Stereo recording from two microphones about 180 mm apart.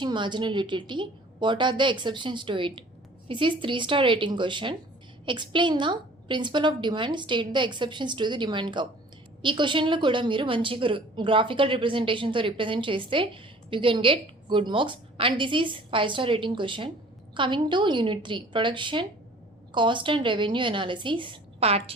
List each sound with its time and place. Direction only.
0.0 s a woman's voice: 25° right (ahead or behind)